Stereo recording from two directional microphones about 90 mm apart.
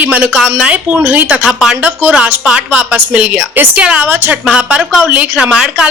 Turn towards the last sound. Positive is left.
turn(degrees=-10)  # may be behind; listen again after turning